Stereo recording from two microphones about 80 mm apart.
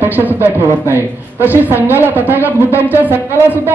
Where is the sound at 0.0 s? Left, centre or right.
Right.